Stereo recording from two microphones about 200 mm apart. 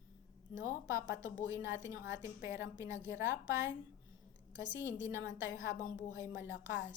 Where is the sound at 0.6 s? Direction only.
15° right (ahead or behind).